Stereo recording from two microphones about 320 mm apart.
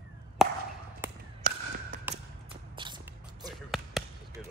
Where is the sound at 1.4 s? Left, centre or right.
Right.